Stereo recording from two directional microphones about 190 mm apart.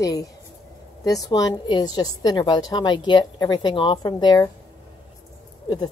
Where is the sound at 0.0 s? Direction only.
20° left (ahead or behind).